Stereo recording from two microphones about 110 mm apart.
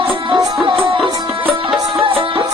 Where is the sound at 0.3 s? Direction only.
50° right (ahead or behind).